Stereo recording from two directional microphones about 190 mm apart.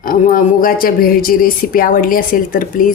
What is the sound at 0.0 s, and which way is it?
Speech, 45° left (ahead or behind).